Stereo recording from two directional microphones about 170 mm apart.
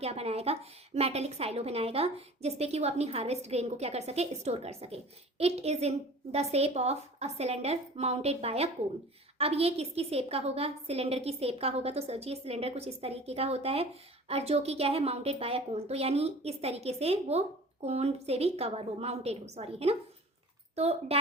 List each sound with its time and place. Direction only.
0.0 s a woman's voice: 35° right (ahead or behind)